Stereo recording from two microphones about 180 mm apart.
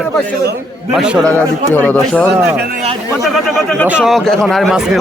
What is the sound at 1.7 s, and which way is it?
Speech, 10° left (ahead or behind).